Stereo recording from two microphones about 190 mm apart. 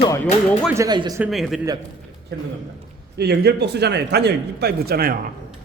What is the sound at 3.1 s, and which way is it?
Speech, 60° right (ahead or behind).